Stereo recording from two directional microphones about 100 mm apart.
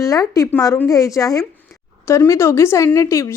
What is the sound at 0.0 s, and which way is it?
A woman's voice, 35° left (ahead or behind).